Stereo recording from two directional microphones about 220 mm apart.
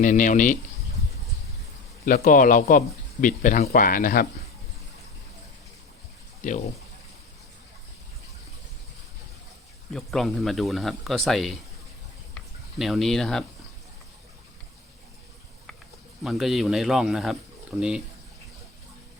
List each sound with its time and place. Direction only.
0.0 s speech: 35° left (ahead or behind)
2.0 s speech: 40° left (ahead or behind)
9.9 s speech: centre (ahead or behind)
12.8 s speech: centre (ahead or behind)
16.2 s speech: centre (ahead or behind)